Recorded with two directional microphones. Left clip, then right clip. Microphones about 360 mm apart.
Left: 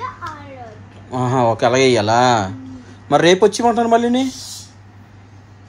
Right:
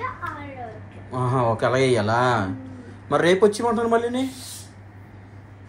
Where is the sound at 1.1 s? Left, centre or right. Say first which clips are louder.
Left 6 dB; left.